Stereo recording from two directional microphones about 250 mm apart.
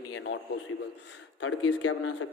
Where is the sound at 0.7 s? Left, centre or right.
Left.